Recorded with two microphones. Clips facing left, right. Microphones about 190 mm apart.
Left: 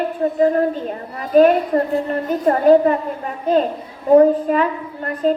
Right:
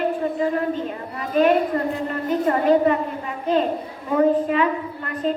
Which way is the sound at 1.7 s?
40° left (ahead or behind).